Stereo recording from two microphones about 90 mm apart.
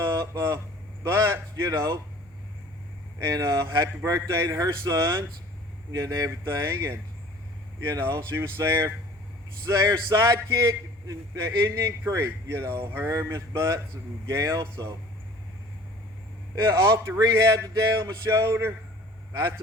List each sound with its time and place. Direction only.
0.0 s vehicle: 35° right (ahead or behind)
1.0 s speech: 30° right (ahead or behind)
3.2 s speech: 40° right (ahead or behind); by 13.1 s 25° right (ahead or behind)
13.1 s speech: 35° right (ahead or behind)
16.6 s speech: 35° right (ahead or behind)